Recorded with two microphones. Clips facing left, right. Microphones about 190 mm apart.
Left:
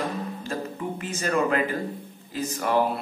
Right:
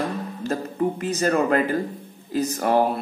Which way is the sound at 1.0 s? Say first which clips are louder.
Right 1 dB; 40° right (ahead or behind).